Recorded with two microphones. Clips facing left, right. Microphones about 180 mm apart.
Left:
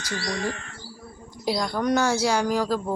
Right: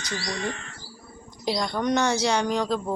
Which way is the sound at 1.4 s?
5° left (ahead or behind).